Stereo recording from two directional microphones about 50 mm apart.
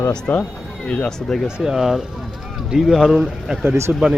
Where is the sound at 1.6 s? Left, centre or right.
Centre.